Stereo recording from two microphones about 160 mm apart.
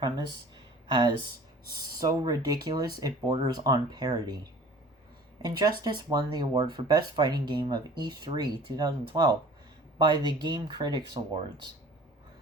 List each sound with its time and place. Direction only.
0.0 s speech: 30° right (ahead or behind)
2.0 s speech: 25° right (ahead or behind)
5.4 s speech: 25° right (ahead or behind)